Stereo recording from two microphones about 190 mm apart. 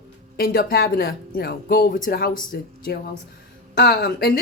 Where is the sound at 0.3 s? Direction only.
50° left (ahead or behind).